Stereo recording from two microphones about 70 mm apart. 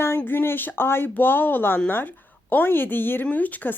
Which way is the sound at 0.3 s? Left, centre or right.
Left.